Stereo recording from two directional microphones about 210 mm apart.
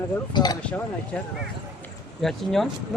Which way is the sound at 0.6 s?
5° left (ahead or behind).